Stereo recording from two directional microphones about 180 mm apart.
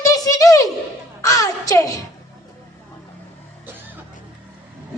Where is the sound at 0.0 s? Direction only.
20° left (ahead or behind).